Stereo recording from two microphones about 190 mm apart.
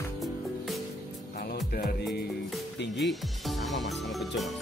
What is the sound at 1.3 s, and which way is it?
Music, 55° left (ahead or behind).